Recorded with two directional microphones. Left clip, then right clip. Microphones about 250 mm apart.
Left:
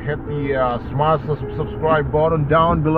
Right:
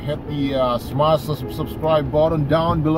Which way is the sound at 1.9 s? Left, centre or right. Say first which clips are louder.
Even; right.